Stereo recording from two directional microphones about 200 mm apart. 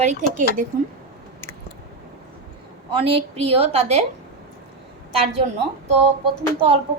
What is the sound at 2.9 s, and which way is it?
A woman's voice, 25° right (ahead or behind).